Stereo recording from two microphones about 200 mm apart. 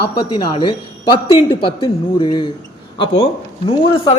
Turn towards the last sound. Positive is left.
turn(degrees=25)  # may be behind; listen again after turning